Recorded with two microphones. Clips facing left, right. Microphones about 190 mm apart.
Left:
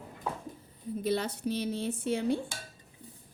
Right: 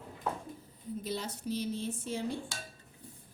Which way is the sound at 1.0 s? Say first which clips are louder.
Left 8 dB; 65° left (ahead or behind).